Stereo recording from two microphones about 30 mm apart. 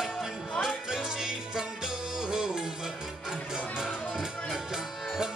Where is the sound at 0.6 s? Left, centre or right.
Centre.